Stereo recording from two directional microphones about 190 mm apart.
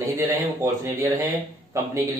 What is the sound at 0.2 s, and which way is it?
A man's voice, 15° right (ahead or behind).